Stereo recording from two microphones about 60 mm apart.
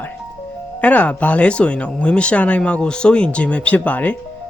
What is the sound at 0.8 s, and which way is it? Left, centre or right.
Speech, left.